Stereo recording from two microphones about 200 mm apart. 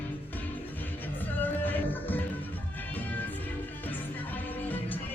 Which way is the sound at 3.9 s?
10° left (ahead or behind).